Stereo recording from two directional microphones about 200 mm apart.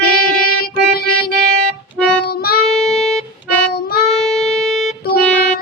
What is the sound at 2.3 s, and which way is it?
Child singing, 50° left (ahead or behind).